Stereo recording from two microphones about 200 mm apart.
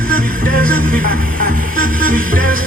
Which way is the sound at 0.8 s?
45° right (ahead or behind).